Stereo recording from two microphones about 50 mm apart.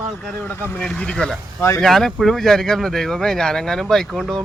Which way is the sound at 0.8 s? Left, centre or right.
Centre.